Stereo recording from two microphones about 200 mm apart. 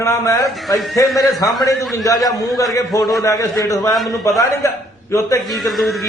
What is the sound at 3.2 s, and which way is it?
Speech, 15° left (ahead or behind).